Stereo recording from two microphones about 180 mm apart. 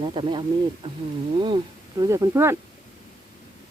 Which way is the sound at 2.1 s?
15° right (ahead or behind).